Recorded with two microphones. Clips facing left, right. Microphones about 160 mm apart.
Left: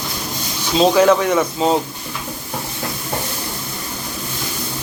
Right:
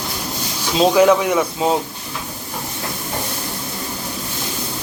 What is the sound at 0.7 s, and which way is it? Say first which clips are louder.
Speech: even; 5° right (ahead or behind).